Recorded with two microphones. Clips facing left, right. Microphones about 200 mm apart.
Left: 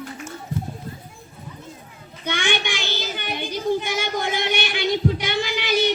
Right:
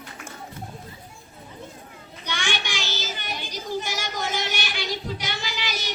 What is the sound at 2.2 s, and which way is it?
Child singing, 55° left (ahead or behind).